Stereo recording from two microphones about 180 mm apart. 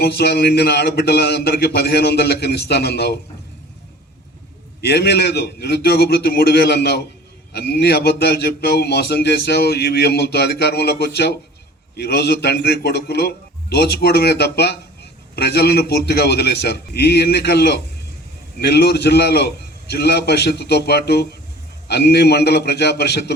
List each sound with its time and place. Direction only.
0.0 s a man's voice: 65° left (ahead or behind)
4.8 s a man's voice: 65° left (ahead or behind)